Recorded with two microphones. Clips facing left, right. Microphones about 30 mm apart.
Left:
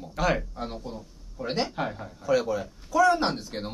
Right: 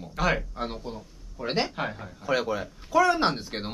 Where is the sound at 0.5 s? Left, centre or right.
Right.